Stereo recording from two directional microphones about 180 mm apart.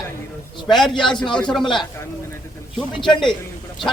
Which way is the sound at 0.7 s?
Centre (ahead or behind).